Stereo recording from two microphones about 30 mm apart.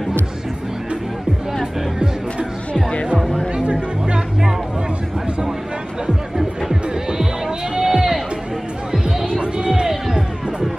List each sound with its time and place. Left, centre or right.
2.7 s music: left
3.2 s music: centre
3.5 s music: right
6.3 s music: centre
9.0 s music: right
9.8 s music: centre